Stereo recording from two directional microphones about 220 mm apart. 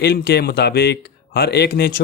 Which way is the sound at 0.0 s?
50° left (ahead or behind).